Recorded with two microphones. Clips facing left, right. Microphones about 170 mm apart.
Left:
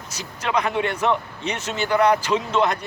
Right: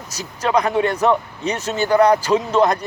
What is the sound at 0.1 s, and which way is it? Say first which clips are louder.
Speech: right 5 dB; 40° right (ahead or behind).